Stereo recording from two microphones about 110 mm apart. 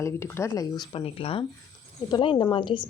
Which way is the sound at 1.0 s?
60° left (ahead or behind).